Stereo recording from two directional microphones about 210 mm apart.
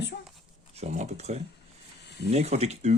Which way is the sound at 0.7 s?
35° right (ahead or behind).